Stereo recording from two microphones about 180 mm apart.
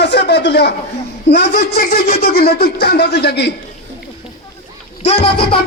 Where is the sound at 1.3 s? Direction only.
80° left.